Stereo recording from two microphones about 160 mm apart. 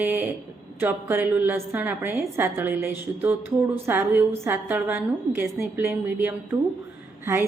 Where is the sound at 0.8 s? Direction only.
15° right (ahead or behind).